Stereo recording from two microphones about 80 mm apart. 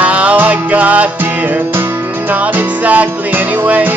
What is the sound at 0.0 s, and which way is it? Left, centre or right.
Music, centre.